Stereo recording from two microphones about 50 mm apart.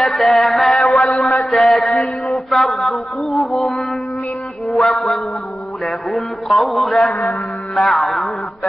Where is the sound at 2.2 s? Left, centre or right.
Centre.